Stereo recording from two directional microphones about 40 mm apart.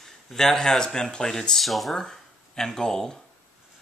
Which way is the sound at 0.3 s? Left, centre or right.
Centre.